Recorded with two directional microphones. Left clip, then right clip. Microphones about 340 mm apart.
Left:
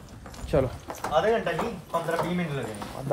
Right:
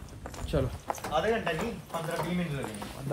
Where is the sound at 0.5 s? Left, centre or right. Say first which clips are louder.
Left 7 dB; left.